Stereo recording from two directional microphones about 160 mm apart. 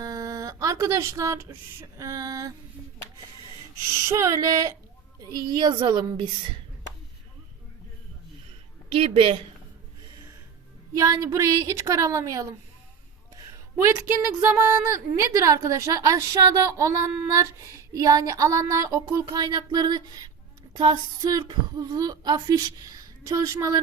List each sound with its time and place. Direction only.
0.0 s speech: 20° right (ahead or behind)
3.8 s speech: 20° right (ahead or behind)
8.9 s a woman's voice: 35° right (ahead or behind)
10.9 s speech: 20° right (ahead or behind)